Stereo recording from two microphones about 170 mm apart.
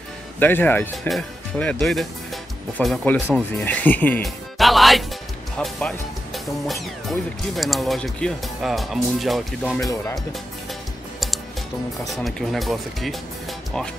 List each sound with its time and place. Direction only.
0.4 s speech: 10° left (ahead or behind)
9.8 s speech: 20° left (ahead or behind)
12.1 s speech: centre (ahead or behind)